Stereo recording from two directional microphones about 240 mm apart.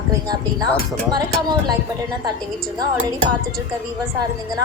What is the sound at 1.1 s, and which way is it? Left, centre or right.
Speech, centre.